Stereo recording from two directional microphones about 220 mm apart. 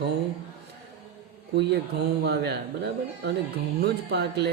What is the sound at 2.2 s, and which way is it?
A man's voice, 50° right (ahead or behind).